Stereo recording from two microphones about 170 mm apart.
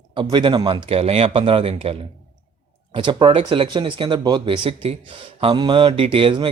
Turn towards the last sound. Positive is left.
turn(degrees=-30)  # may be behind; listen again after turning